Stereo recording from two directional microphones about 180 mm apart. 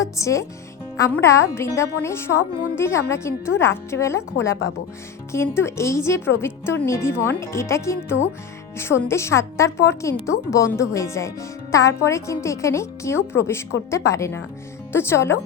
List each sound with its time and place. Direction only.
0.0 s a woman's voice: 15° left (ahead or behind)
5.3 s a woman's voice: 15° left (ahead or behind)